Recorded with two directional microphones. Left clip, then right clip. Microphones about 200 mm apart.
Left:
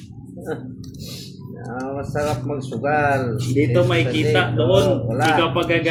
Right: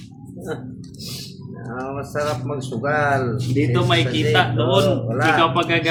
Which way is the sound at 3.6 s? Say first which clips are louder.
Left 1 dB; 25° right (ahead or behind).